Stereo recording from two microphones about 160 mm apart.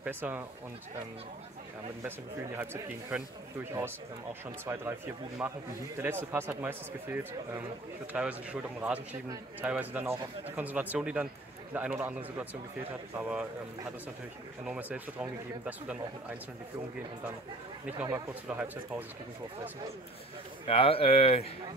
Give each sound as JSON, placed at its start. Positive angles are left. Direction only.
{"t": 0.0, "sound": "speech", "side_deg": -10}
{"t": 2.0, "sound": "speech", "side_deg": -15}
{"t": 14.6, "sound": "speech", "side_deg": -10}
{"t": 18.5, "sound": "speech", "side_deg": -10}
{"t": 20.6, "sound": "speech", "side_deg": 35}